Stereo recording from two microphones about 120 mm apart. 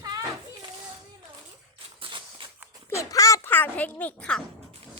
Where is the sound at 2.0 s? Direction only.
45° right (ahead or behind).